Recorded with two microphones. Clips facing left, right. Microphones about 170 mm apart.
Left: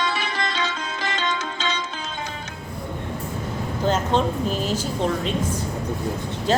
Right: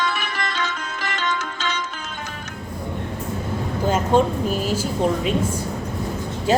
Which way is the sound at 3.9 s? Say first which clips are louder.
Right 3 dB; 10° right (ahead or behind).